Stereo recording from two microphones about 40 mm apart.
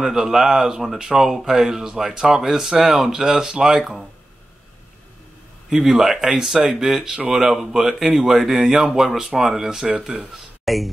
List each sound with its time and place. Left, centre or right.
0.0 s speech: centre
5.7 s speech: centre
6.6 s speech: right
7.2 s speech: centre
10.6 s a sound: centre